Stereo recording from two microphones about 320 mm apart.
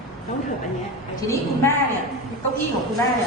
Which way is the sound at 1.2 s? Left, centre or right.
Centre.